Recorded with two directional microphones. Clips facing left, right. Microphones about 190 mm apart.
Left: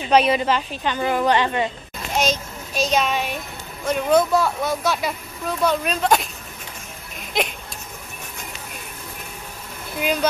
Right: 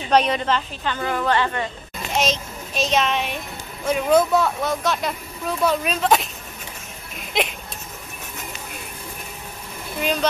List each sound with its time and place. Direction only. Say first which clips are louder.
0.1 s a woman's voice: left 2 dB; 10° left (ahead or behind)
2.1 s a child's voice: left 1 dB; centre (ahead or behind)
7.3 s speech: even; centre (ahead or behind)
9.9 s speech: left 1 dB; 5° left (ahead or behind)